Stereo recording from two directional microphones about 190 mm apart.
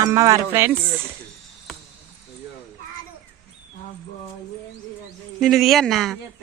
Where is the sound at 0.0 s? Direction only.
20° right (ahead or behind).